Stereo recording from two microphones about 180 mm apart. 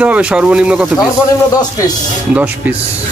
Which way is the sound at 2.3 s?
10° right (ahead or behind).